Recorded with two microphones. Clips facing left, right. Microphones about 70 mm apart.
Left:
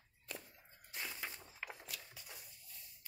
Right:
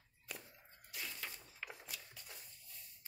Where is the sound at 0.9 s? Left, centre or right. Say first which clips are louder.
Left 2 dB; left.